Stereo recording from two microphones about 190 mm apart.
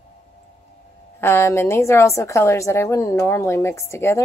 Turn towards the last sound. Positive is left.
turn(degrees=15)  # may be behind; listen again after turning